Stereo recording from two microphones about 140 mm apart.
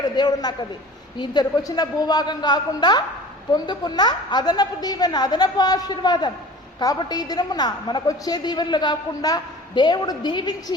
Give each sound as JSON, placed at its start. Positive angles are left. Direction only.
{"t": 0.0, "sound": "a man's voice", "side_deg": 30}